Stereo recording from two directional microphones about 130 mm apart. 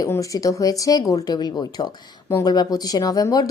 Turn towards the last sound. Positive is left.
turn(degrees=25)  # may be behind; listen again after turning